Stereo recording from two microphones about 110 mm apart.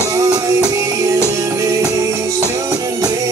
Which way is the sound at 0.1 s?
30° right (ahead or behind).